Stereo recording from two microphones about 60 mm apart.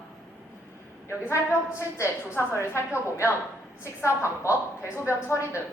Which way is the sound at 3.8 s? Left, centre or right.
Left.